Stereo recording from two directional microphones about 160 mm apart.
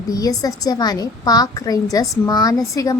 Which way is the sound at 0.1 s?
20° left (ahead or behind).